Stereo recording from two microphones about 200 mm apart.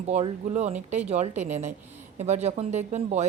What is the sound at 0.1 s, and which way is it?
Speech, 35° right (ahead or behind).